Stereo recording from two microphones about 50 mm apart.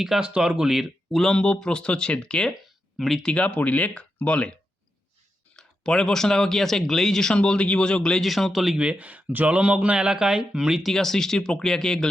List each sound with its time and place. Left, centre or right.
0.2 s speech: centre
1.1 s speech: centre
2.6 s a sound: centre
3.2 s speech: left
5.5 s speech: centre
7.3 s speech: centre
8.2 s speech: centre
8.8 s speech: right
10.8 s speech: centre